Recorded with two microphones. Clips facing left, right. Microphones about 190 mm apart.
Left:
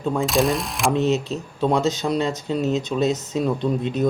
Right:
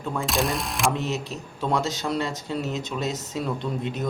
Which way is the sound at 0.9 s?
20° left (ahead or behind).